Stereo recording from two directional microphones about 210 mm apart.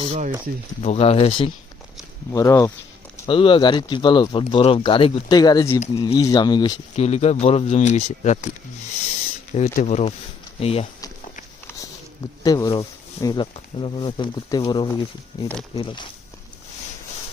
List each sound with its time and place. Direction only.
0.0 s speech: 25° right (ahead or behind)
0.8 s speech: 30° left (ahead or behind)
2.3 s speech: 15° left (ahead or behind); by 8.4 s 35° left (ahead or behind)
9.6 s speech: 35° left (ahead or behind)
12.4 s speech: 15° left (ahead or behind)